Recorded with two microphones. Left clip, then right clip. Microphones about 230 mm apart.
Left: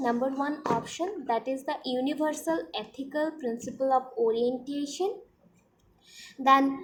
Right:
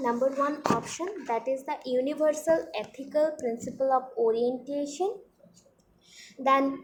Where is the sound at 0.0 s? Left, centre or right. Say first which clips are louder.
Right 2 dB; centre.